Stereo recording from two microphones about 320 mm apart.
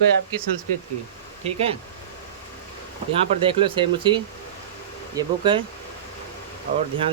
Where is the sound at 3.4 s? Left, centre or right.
Centre.